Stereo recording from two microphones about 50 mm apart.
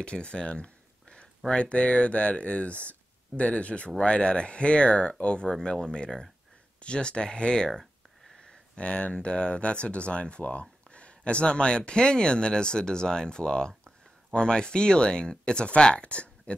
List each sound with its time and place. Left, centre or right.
0.0 s speech: left